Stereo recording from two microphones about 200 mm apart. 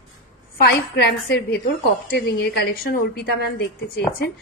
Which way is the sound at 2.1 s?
50° left (ahead or behind).